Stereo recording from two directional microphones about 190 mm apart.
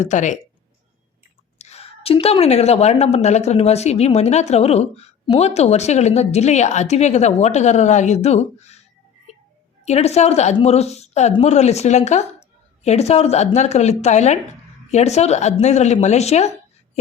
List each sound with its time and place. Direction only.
0.0 s a woman's voice: 40° left (ahead or behind)
1.5 s a woman's voice: 35° left (ahead or behind)
9.8 s a woman's voice: 35° left (ahead or behind)